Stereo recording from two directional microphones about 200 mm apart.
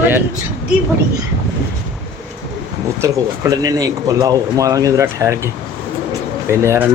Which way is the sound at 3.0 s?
15° right (ahead or behind).